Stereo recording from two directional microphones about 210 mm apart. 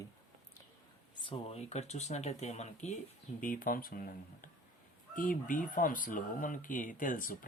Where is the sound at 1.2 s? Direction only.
30° left (ahead or behind).